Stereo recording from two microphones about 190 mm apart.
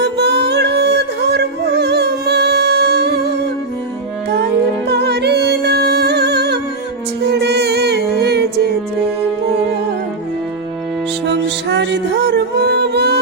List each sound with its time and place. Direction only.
0.0 s music: 60° right (ahead or behind)
4.9 s music: 60° right (ahead or behind)
11.3 s music: 65° right (ahead or behind)